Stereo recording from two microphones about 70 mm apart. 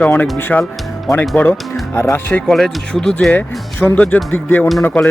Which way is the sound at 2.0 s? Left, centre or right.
Left.